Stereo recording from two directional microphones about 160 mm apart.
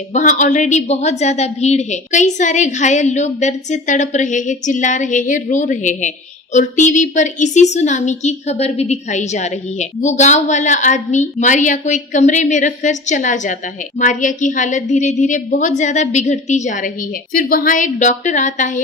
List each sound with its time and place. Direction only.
0.1 s a woman's voice: 50° left (ahead or behind)
17.3 s a woman's voice: 65° left (ahead or behind)